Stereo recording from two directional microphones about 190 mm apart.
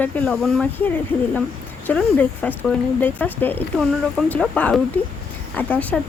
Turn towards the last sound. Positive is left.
turn(degrees=10)  # may be behind; listen again after turning